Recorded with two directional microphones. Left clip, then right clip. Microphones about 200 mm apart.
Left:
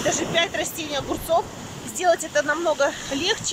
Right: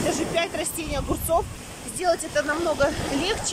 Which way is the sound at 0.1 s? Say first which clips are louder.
Left 2 dB; 5° right (ahead or behind).